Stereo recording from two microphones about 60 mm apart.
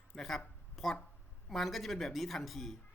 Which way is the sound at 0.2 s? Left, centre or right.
Centre.